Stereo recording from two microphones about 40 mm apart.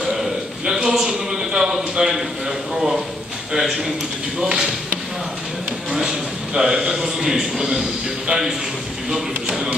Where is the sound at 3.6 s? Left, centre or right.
Centre.